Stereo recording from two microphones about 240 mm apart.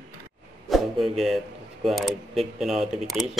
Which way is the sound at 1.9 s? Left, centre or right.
Centre.